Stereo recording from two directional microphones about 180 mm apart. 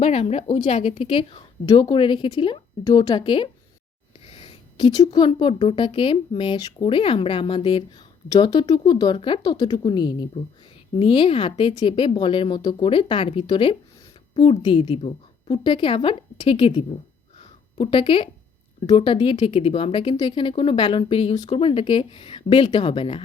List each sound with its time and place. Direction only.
0.0 s a woman's voice: 35° left (ahead or behind)
17.3 s a sound: 30° left (ahead or behind)
18.9 s speech: 25° left (ahead or behind)
21.3 s speech: 20° left (ahead or behind)
21.6 s speech: 30° left (ahead or behind)